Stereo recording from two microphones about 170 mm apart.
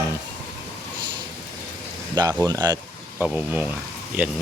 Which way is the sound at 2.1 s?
20° right (ahead or behind).